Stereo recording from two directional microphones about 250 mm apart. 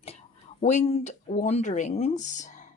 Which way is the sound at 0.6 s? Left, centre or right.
Left.